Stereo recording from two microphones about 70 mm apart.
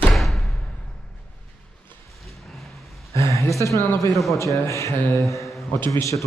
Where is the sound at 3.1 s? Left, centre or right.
Left.